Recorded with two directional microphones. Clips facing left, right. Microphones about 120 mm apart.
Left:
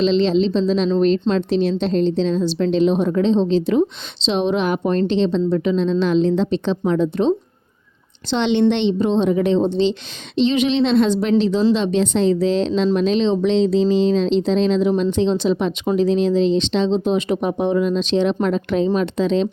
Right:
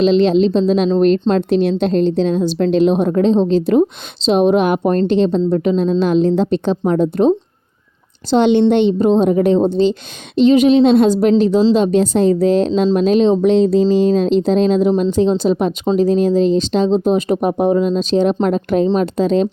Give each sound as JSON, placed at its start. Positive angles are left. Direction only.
{"t": 0.0, "sound": "a woman's voice", "side_deg": -50}